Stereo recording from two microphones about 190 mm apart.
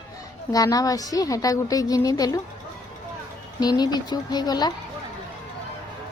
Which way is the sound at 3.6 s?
20° left (ahead or behind).